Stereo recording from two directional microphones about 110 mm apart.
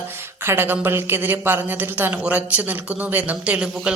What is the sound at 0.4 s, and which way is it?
A woman's voice, 20° right (ahead or behind).